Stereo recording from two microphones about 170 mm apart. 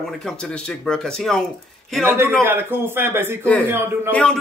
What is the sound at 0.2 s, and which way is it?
Speech, 5° left (ahead or behind).